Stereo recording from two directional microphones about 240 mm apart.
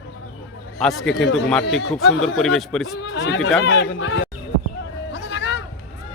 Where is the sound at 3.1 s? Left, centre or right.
Left.